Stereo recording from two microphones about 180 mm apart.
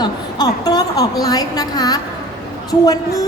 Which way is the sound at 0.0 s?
20° left (ahead or behind).